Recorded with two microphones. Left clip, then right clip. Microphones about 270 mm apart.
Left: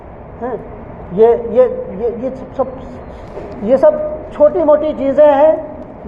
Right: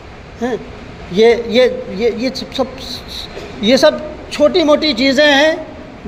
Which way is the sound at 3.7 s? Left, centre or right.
Right.